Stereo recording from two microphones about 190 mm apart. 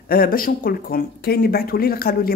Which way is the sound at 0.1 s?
50° left (ahead or behind).